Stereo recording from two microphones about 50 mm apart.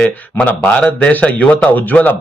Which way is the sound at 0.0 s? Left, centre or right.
Left.